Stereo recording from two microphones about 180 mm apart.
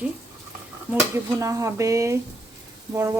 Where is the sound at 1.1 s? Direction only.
15° right (ahead or behind).